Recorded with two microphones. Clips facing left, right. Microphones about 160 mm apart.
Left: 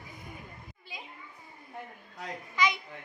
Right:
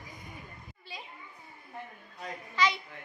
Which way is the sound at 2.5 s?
10° left (ahead or behind).